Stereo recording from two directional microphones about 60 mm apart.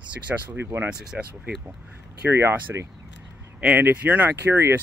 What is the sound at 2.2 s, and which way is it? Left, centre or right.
Speech, right.